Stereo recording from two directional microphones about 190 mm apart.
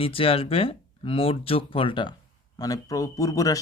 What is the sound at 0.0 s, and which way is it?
Speech, 30° left (ahead or behind).